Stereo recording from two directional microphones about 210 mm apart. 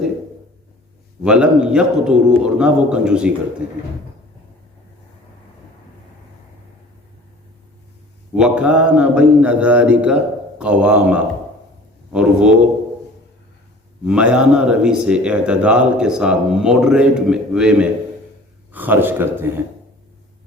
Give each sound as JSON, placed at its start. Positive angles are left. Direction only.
{"t": 1.2, "sound": "a man's voice", "side_deg": -5}
{"t": 8.4, "sound": "speech", "side_deg": -5}
{"t": 14.0, "sound": "a man's voice", "side_deg": -5}